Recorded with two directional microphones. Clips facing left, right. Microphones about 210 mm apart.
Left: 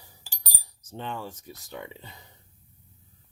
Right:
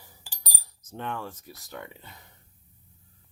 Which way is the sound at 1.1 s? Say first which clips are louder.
Even; 15° left (ahead or behind).